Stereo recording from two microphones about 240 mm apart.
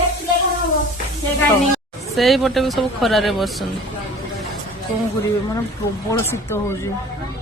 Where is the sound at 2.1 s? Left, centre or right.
Centre.